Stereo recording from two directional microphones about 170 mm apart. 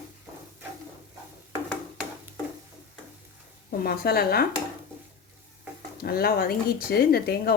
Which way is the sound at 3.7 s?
60° left (ahead or behind).